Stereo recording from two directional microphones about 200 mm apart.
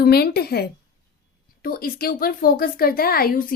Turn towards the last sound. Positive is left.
turn(degrees=45)  # may be behind; listen again after turning